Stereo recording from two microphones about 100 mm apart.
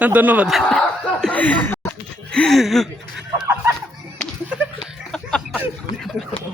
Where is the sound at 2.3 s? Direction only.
5° left (ahead or behind).